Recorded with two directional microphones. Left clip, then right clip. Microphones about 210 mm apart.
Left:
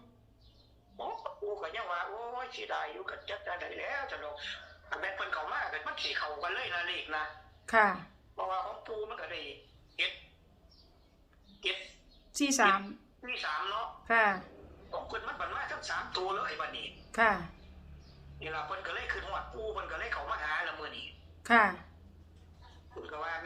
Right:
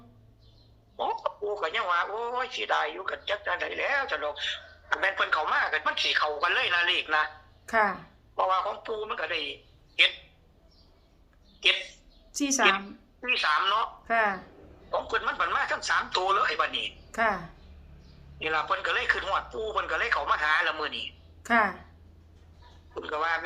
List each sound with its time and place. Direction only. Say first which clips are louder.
0.9 s a man's voice: right 10 dB; 45° right (ahead or behind)
7.7 s a woman's voice: right 1 dB; 5° right (ahead or behind)
8.4 s a man's voice: right 10 dB; 45° right (ahead or behind)
12.3 s a woman's voice: right 2 dB; 5° right (ahead or behind)
13.2 s a man's voice: right 11 dB; 45° right (ahead or behind)
14.0 s speech: left 3 dB; 5° right (ahead or behind)
15.1 s a man's voice: right 11 dB; 45° right (ahead or behind)
17.1 s a woman's voice: even; 5° right (ahead or behind)
18.3 s a man's voice: right 11 dB; 45° right (ahead or behind)
21.4 s a woman's voice: right 1 dB; 5° right (ahead or behind)
23.0 s a man's voice: right 10 dB; 45° right (ahead or behind)